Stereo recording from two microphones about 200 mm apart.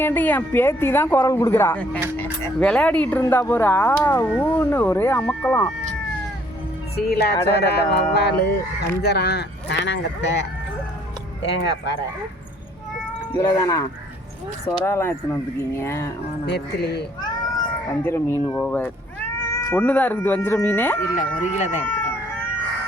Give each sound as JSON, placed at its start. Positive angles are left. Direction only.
{"t": 0.0, "sound": "speech", "side_deg": 10}
{"t": 6.9, "sound": "speech", "side_deg": 50}
{"t": 13.3, "sound": "speech", "side_deg": 20}
{"t": 16.5, "sound": "speech", "side_deg": 55}
{"t": 17.2, "sound": "cat", "side_deg": 20}
{"t": 18.6, "sound": "speech", "side_deg": 10}
{"t": 21.4, "sound": "speech", "side_deg": 35}